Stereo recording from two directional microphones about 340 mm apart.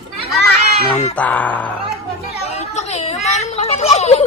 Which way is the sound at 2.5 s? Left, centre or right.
Centre.